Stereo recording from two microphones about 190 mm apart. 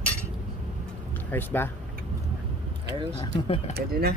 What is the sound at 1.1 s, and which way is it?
Speech, 10° left (ahead or behind).